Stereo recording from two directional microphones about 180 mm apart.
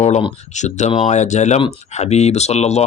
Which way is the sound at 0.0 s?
40° left (ahead or behind).